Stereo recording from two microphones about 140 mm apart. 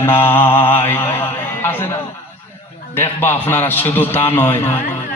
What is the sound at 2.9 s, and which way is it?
A man's voice, 15° left (ahead or behind).